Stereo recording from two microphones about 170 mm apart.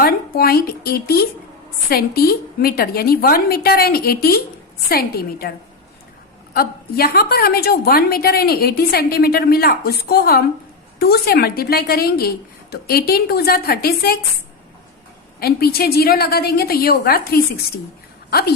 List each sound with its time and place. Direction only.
0.0 s a woman's voice: 60° left (ahead or behind)
15.4 s a woman's voice: 65° left (ahead or behind)